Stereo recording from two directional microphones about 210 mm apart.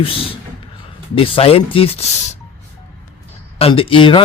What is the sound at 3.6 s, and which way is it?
Speech, 25° left (ahead or behind).